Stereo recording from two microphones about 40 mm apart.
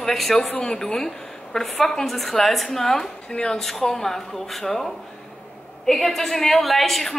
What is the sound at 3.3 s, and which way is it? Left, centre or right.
Speech, centre.